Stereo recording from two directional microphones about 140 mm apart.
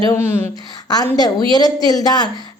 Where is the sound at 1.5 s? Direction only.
25° left (ahead or behind).